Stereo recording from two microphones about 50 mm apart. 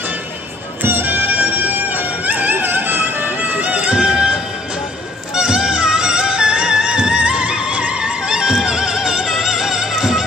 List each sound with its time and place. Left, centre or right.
0.8 s music: right; by 10.2 s centre